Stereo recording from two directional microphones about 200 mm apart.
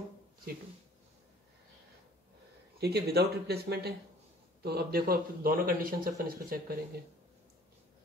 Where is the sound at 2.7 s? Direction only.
50° right (ahead or behind).